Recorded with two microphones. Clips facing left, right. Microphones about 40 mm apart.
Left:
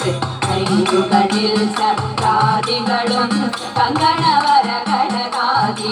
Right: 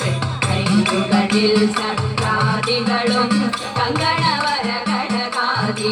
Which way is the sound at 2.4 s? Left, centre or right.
Left.